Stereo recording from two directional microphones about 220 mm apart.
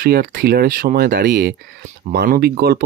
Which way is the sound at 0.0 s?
45° right (ahead or behind).